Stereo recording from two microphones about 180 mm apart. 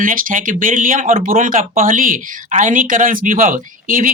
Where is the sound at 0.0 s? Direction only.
50° right (ahead or behind).